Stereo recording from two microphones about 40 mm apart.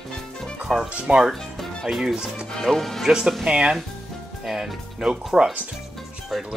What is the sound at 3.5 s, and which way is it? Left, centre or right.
Speech, right.